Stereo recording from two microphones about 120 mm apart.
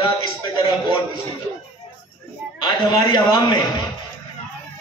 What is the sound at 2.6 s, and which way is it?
A man's voice, 40° left (ahead or behind).